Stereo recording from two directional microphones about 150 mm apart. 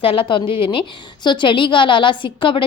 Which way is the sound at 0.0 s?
35° left (ahead or behind).